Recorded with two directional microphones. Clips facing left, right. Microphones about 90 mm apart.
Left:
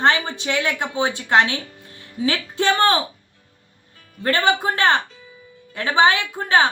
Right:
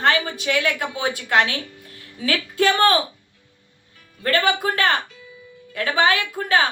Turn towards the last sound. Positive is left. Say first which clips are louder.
# left 2 dB
turn(degrees=25)  # may be behind; listen again after turning